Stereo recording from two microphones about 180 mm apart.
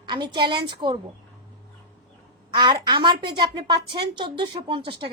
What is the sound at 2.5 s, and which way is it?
A child's voice, 25° right (ahead or behind).